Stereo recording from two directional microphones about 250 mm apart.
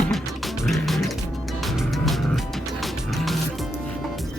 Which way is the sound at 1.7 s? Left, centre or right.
Centre.